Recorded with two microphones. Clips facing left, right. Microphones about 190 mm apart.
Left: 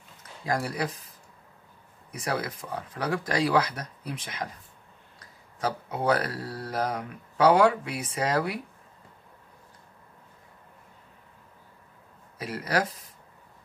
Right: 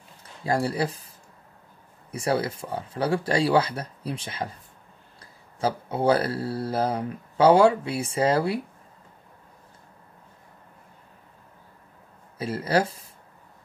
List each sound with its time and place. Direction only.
0.5 s speech: 30° right (ahead or behind)
5.6 s speech: 30° right (ahead or behind)
12.4 s speech: 30° right (ahead or behind)